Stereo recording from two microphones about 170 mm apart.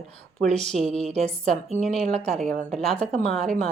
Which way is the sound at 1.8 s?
5° left (ahead or behind).